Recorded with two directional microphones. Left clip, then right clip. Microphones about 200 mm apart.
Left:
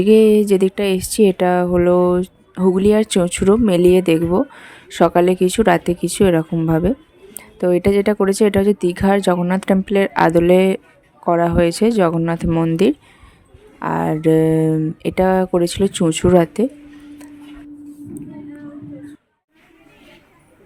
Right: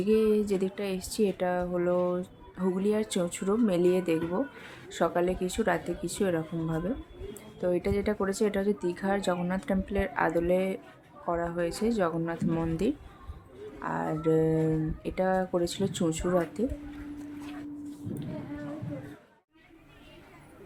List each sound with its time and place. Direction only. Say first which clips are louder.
0.0 s speech: left 14 dB; 45° left (ahead or behind)